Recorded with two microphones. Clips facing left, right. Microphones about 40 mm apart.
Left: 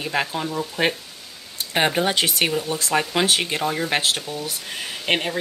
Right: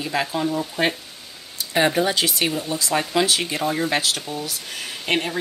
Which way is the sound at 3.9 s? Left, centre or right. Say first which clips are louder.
Left 1 dB; left.